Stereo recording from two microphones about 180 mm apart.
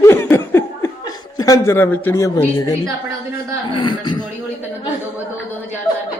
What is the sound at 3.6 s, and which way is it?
Speech, 25° left (ahead or behind).